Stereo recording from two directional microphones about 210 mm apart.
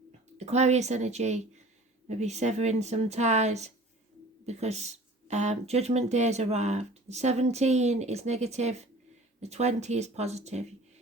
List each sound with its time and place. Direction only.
0.3 s speech: 30° right (ahead or behind)